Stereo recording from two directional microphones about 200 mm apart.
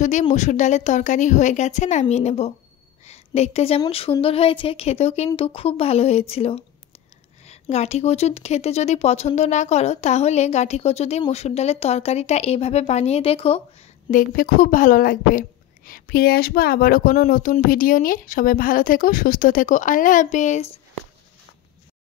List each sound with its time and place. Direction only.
0.0 s a woman's voice: 35° left (ahead or behind)
14.1 s a woman's voice: 45° left (ahead or behind)